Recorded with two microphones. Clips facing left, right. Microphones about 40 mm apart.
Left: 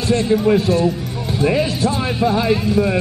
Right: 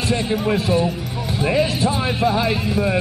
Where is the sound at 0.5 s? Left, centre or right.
Centre.